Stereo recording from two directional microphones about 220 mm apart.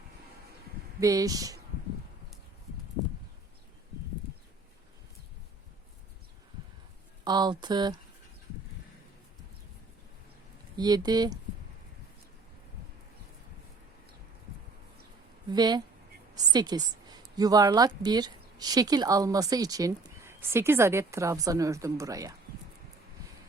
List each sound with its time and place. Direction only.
0.9 s a woman's voice: 15° right (ahead or behind)
7.3 s speech: 20° right (ahead or behind)
10.8 s a woman's voice: 20° right (ahead or behind)
15.5 s a woman's voice: 20° right (ahead or behind)